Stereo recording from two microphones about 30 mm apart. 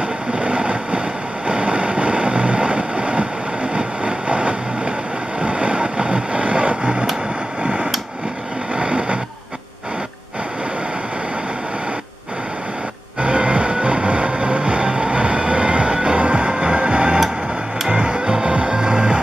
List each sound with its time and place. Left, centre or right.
0.3 s vehicle: right
7.6 s a sound: right
13.2 s music: right